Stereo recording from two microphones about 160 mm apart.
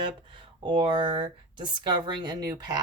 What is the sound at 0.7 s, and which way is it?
Speech, 30° right (ahead or behind).